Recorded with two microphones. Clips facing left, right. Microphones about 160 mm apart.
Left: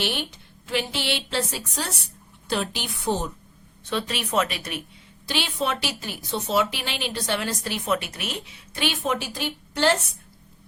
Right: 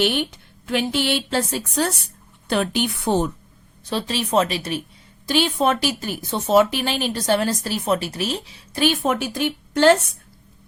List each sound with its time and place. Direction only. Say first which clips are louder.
0.0 s a woman's voice: right 7 dB; 55° right (ahead or behind)
3.8 s speech: right 4 dB; 35° right (ahead or behind)
5.2 s a woman's voice: right 8 dB; 45° right (ahead or behind)